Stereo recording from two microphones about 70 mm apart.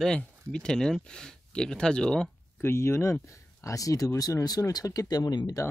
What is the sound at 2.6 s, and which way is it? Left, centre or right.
Speech, left.